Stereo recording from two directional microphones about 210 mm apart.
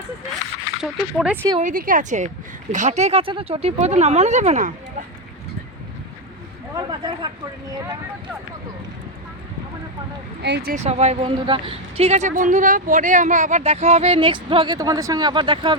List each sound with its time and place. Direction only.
0.8 s speech: 5° right (ahead or behind)
1.6 s speech: 40° right (ahead or behind)
6.7 s speech: 20° right (ahead or behind)
10.4 s speech: 50° right (ahead or behind)
10.8 s a woman's voice: 30° right (ahead or behind)